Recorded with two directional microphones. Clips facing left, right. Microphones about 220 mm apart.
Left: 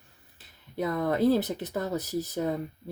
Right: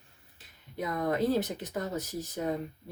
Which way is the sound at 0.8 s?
35° left (ahead or behind).